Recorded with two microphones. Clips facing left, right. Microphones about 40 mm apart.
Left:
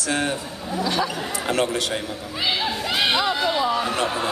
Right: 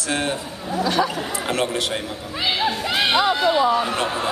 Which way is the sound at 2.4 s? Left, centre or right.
Centre.